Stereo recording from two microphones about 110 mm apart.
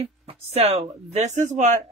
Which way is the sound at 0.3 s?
80° right.